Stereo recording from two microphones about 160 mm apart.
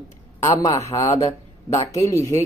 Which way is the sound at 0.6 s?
20° left (ahead or behind).